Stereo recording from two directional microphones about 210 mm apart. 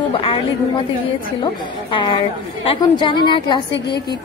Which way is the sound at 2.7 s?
20° left (ahead or behind).